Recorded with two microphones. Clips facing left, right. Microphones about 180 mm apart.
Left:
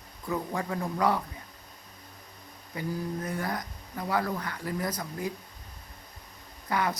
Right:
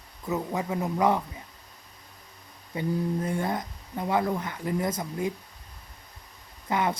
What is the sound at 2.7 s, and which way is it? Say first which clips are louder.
Speech: right 5 dB; 25° right (ahead or behind).